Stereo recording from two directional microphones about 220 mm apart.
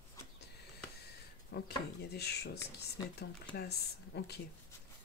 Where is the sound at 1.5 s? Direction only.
45° left (ahead or behind).